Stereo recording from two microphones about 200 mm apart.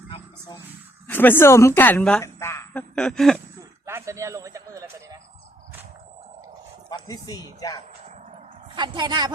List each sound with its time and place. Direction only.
0.1 s a sound: 20° left (ahead or behind)
1.0 s a woman's voice: 10° left (ahead or behind)
3.8 s a man's voice: 15° right (ahead or behind)
6.9 s speech: 20° left (ahead or behind)
8.0 s a sound: 35° right (ahead or behind)
8.8 s a woman's voice: 25° right (ahead or behind)